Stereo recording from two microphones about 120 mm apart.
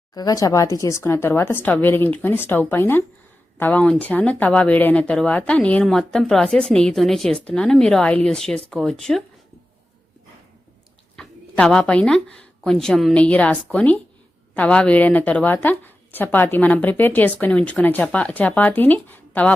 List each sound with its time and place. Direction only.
0.1 s speech: 30° left (ahead or behind); by 9.2 s 5° left (ahead or behind)
11.2 s speech: 5° left (ahead or behind)